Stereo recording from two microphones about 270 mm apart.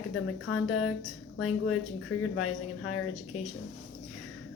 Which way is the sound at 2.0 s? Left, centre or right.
Left.